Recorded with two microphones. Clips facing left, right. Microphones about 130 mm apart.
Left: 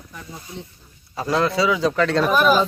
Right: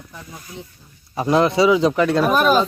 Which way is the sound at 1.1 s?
20° right (ahead or behind).